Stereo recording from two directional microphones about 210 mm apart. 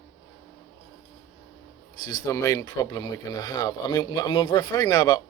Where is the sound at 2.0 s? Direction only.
20° left (ahead or behind).